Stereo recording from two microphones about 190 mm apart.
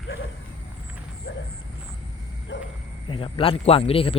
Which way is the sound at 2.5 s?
75° left (ahead or behind).